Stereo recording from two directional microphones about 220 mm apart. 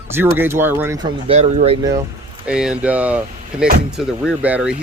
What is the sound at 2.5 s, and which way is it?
Speech, 5° right (ahead or behind).